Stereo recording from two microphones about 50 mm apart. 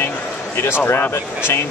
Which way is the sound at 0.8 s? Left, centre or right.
Left.